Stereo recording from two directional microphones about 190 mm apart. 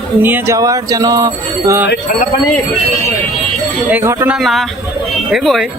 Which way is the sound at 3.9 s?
15° right (ahead or behind).